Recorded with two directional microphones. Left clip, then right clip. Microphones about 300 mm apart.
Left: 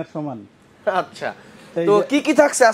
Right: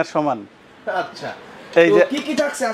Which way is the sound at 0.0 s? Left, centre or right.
Centre.